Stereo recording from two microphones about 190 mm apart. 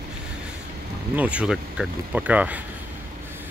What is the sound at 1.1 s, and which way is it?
Speech, 5° right (ahead or behind).